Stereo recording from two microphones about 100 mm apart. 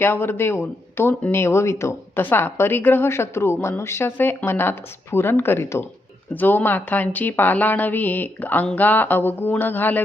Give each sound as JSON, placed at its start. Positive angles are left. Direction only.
{"t": 0.0, "sound": "speech", "side_deg": 25}